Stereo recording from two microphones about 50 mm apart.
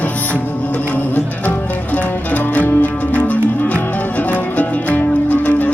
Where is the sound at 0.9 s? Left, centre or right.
Left.